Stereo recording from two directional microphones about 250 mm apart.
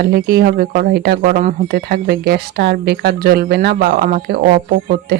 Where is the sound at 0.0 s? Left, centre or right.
Right.